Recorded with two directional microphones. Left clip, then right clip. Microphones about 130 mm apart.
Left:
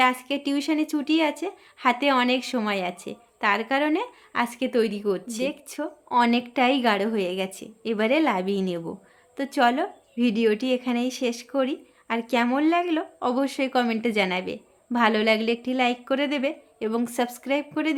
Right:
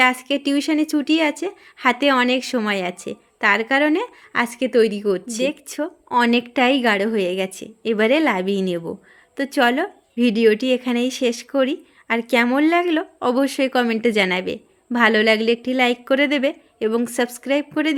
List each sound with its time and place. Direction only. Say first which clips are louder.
0.0 s a woman's voice: right 5 dB; 40° right (ahead or behind)